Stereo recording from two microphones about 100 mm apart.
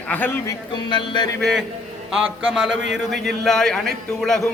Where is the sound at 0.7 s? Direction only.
50° left (ahead or behind).